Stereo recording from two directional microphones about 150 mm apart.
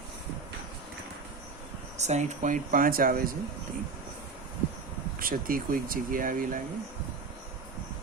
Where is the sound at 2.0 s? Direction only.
50° right (ahead or behind); by 3.3 s 75° right (ahead or behind).